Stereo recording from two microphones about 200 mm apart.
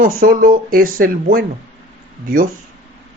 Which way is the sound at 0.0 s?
45° right (ahead or behind).